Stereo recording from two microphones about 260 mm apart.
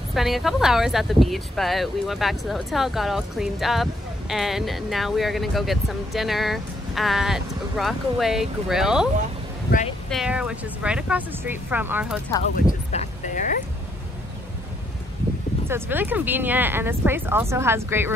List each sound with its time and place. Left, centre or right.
0.1 s speech: centre
12.9 s a sound: left
15.7 s speech: centre